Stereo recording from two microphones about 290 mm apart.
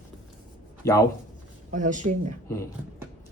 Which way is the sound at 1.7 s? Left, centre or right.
Right.